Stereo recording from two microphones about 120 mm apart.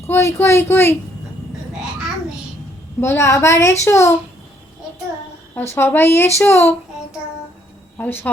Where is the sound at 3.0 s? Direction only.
20° left (ahead or behind).